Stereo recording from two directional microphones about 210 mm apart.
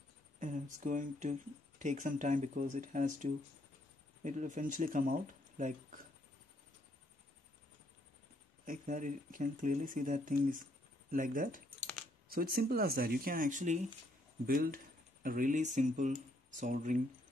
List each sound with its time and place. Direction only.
0.7 s speech: 40° right (ahead or behind)
8.6 s speech: 40° right (ahead or behind)